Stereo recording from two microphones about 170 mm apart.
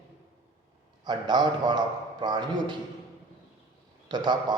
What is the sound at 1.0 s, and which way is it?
A man's voice, 25° right (ahead or behind).